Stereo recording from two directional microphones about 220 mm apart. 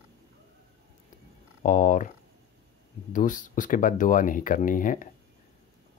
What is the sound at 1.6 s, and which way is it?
Speech, 35° left (ahead or behind).